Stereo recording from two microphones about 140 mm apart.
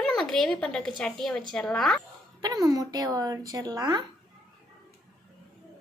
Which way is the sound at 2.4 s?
30° right (ahead or behind).